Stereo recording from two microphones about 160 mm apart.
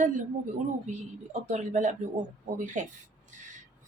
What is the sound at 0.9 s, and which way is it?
Speech, 45° right (ahead or behind).